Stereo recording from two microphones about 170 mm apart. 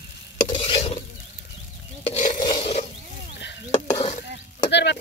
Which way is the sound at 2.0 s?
40° left (ahead or behind).